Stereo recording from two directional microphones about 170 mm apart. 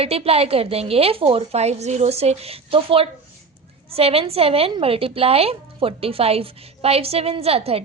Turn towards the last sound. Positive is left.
turn(degrees=-35)  # may be behind; listen again after turning